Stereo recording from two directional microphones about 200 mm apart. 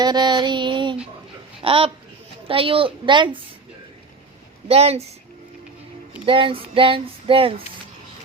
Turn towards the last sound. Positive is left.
turn(degrees=-25)  # may be behind; listen again after turning